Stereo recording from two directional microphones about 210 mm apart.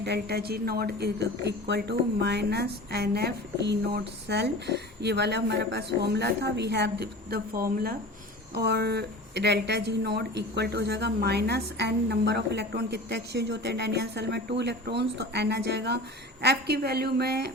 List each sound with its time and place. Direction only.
0.0 s a woman's voice: 50° right (ahead or behind)